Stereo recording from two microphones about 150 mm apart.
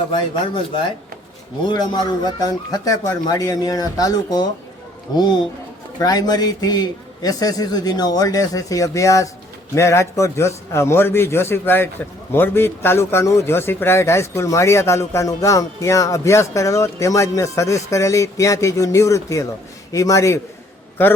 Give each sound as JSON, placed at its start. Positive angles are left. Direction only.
{"t": 0.1, "sound": "a man's voice", "side_deg": 30}